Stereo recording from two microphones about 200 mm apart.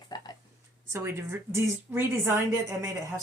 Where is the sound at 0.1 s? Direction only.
20° left (ahead or behind).